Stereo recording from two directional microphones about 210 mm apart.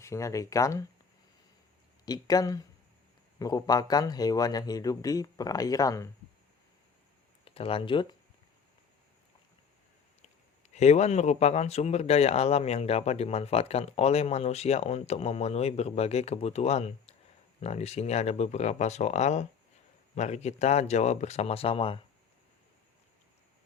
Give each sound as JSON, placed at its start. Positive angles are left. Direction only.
{"t": 0.0, "sound": "a man's voice", "side_deg": 15}
{"t": 2.0, "sound": "a man's voice", "side_deg": 20}
{"t": 7.4, "sound": "speech", "side_deg": 25}
{"t": 10.8, "sound": "speech", "side_deg": 30}